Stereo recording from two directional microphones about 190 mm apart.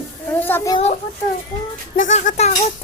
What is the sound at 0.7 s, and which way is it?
Speech, 30° left (ahead or behind).